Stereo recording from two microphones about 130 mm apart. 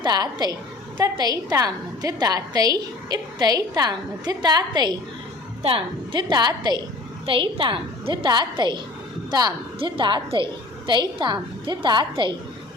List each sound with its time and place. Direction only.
0.0 s a woman's voice: 30° right (ahead or behind)